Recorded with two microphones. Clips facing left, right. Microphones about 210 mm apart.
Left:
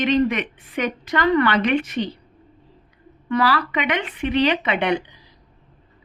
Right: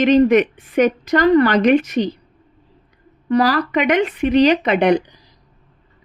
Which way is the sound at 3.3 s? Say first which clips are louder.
Right 5 dB; 40° right (ahead or behind).